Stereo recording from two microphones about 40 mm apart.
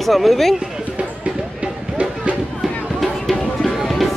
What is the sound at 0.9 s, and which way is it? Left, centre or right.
Music, right.